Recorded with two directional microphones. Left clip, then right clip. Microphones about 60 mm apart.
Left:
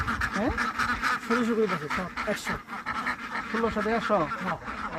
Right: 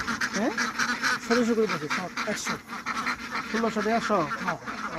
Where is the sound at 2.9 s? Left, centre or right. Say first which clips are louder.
Right 1 dB; centre.